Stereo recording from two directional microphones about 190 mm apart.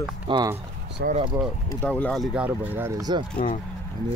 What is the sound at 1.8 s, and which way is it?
Speech, 5° left (ahead or behind).